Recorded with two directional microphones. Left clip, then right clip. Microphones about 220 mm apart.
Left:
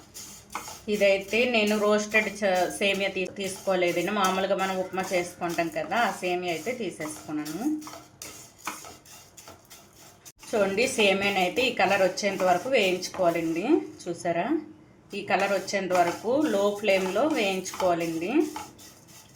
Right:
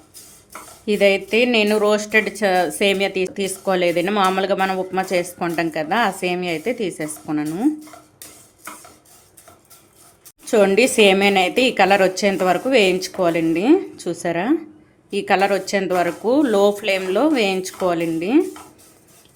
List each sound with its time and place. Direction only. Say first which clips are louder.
0.9 s speech: right 7 dB; 50° right (ahead or behind)
10.5 s speech: right 10 dB; 50° right (ahead or behind)